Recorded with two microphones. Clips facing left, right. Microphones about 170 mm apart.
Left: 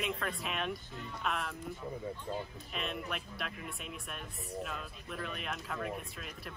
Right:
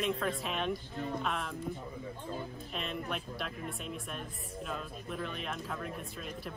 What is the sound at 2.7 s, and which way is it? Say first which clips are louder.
Speech: right 1 dB; centre (ahead or behind).